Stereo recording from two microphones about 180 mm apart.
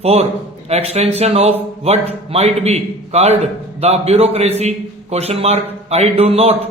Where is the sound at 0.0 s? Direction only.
35° right (ahead or behind).